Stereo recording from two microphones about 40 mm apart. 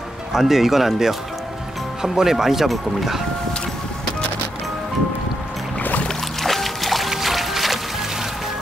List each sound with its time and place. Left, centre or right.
0.3 s speech: centre
5.8 s music: left
6.0 s music: centre